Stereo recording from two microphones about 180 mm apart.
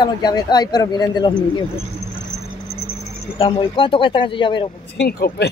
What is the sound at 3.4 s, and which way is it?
Speech, 30° left (ahead or behind).